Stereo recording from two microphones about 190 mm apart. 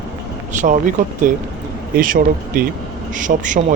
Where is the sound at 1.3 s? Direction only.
45° right (ahead or behind).